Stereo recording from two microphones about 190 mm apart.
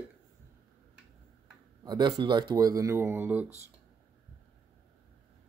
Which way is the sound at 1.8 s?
20° right (ahead or behind).